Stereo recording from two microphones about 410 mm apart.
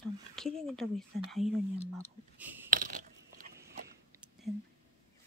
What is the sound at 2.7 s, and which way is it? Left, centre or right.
Ratchet, centre.